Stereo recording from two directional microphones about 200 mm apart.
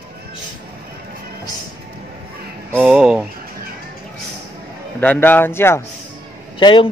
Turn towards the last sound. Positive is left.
turn(degrees=25)  # may be behind; listen again after turning